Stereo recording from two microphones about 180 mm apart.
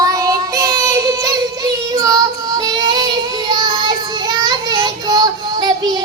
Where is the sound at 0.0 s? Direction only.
20° right (ahead or behind).